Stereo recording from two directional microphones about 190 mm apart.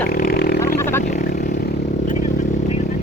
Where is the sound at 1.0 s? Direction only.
40° left (ahead or behind).